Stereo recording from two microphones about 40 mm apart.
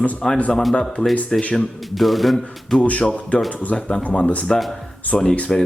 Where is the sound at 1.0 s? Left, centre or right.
Left.